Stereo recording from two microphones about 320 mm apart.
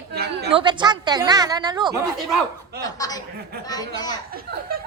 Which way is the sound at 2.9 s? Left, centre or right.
Centre.